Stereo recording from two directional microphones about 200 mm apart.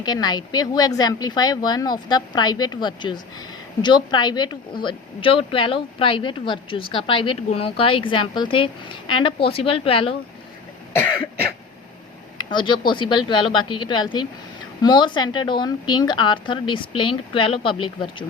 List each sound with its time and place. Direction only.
0.0 s speech: 20° left (ahead or behind)
12.4 s speech: 25° left (ahead or behind)